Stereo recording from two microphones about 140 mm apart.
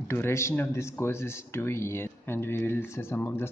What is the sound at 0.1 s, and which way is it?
Speech, 20° left (ahead or behind).